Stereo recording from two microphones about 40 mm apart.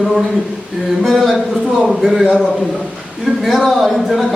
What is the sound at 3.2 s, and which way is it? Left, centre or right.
Speech, centre.